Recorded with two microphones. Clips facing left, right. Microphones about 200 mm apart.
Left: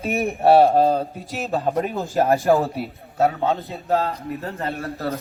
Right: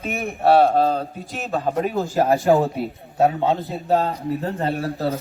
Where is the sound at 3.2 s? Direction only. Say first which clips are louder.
Right 2 dB; 15° right (ahead or behind).